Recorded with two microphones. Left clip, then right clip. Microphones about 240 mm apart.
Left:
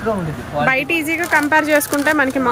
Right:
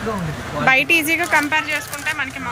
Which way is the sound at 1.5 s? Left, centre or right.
Left.